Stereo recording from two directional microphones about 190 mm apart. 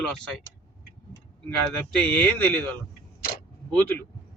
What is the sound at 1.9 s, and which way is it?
Speech, 5° left (ahead or behind).